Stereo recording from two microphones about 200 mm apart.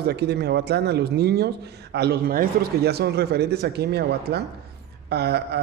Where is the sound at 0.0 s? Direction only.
55° right (ahead or behind).